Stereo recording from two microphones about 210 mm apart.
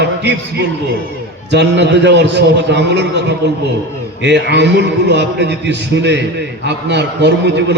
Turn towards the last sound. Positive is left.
turn(degrees=-55)  # may be behind; listen again after turning